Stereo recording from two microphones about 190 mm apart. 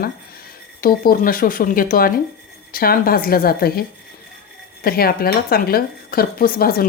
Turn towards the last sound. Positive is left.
turn(degrees=50)  # may be behind; listen again after turning